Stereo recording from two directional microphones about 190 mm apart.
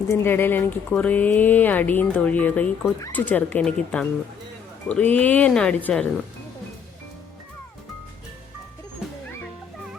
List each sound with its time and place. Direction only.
0.1 s speech: 10° left (ahead or behind)